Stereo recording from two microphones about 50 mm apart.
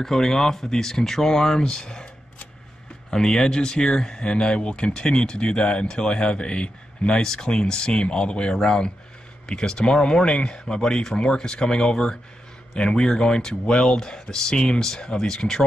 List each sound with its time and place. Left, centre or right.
0.0 s speech: centre
3.1 s speech: centre